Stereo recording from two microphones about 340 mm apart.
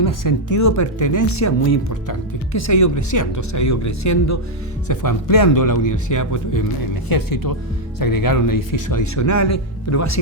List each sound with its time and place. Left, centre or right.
0.0 s speech: left
4.9 s speech: left
7.1 s speech: left